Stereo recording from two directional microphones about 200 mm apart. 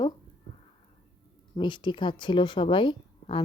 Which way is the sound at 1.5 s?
25° left (ahead or behind).